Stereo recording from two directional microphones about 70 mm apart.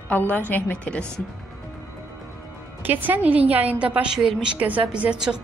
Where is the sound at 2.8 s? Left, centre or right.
Right.